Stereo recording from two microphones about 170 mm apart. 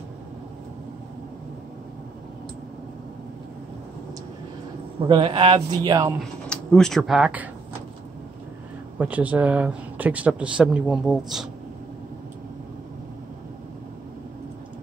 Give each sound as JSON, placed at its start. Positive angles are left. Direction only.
{"t": 5.0, "sound": "a man's voice", "side_deg": -30}
{"t": 6.5, "sound": "speech", "side_deg": 5}
{"t": 8.9, "sound": "speech", "side_deg": -10}